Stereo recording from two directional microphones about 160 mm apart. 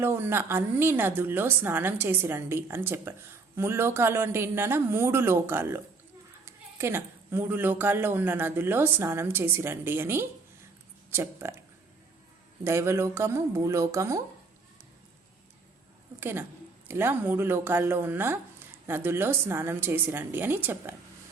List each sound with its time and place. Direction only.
0.0 s a woman's voice: 15° right (ahead or behind)
12.6 s a woman's voice: 15° right (ahead or behind)
16.2 s a woman's voice: 15° right (ahead or behind)